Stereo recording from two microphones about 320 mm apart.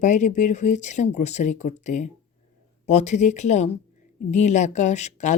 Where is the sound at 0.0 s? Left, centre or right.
Left.